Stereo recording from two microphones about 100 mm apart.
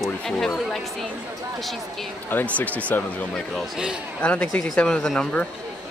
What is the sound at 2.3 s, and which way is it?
Speech, 15° left (ahead or behind).